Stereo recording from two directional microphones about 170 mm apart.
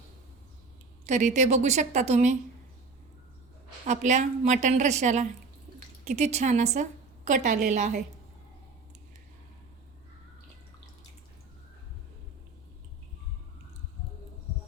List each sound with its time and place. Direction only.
1.0 s a woman's voice: 45° right (ahead or behind)
3.8 s a woman's voice: 45° right (ahead or behind)